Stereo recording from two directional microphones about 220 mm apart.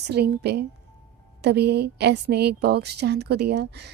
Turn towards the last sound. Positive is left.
turn(degrees=-50)  # may be behind; listen again after turning